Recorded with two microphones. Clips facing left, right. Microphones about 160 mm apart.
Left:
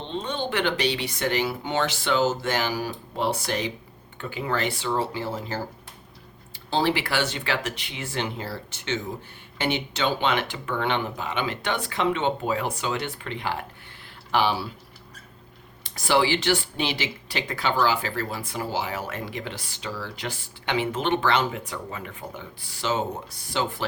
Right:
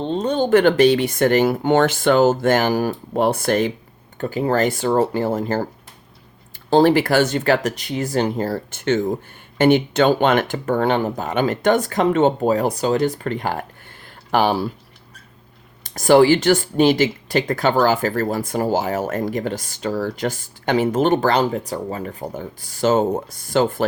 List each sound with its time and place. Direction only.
0.0 s speech: 40° right (ahead or behind)
4.2 s speech: 40° right (ahead or behind)
6.7 s speech: 50° right (ahead or behind)
15.8 s speech: 45° right (ahead or behind)